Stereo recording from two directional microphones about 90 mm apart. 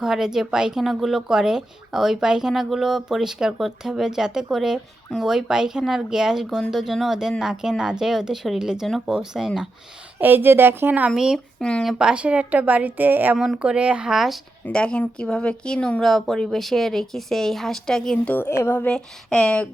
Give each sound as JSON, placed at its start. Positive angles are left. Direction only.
{"t": 0.0, "sound": "speech", "side_deg": -5}
{"t": 10.2, "sound": "a woman's voice", "side_deg": -20}
{"t": 11.1, "sound": "a woman's voice", "side_deg": -5}
{"t": 11.6, "sound": "speech", "side_deg": 10}
{"t": 11.9, "sound": "a woman's voice", "side_deg": -10}
{"t": 13.3, "sound": "speech", "side_deg": 0}
{"t": 13.6, "sound": "a woman's voice", "side_deg": -15}
{"t": 14.6, "sound": "speech", "side_deg": 10}
{"t": 18.3, "sound": "speech", "side_deg": 25}
{"t": 18.9, "sound": "speech", "side_deg": 10}